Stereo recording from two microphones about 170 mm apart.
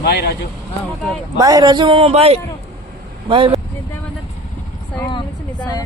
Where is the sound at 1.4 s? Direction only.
20° right (ahead or behind).